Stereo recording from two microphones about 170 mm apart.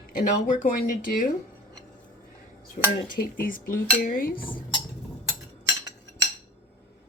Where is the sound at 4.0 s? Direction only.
55° left (ahead or behind).